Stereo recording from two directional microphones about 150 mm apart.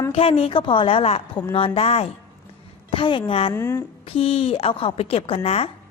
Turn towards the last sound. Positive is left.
turn(degrees=40)  # may be behind; listen again after turning